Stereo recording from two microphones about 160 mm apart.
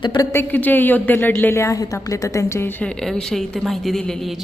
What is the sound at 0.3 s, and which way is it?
A woman's voice, 10° left (ahead or behind).